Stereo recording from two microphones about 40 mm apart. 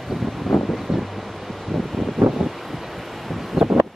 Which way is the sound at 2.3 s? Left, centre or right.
Centre.